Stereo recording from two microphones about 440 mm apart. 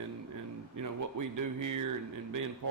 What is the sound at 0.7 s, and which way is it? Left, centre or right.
Speech, right.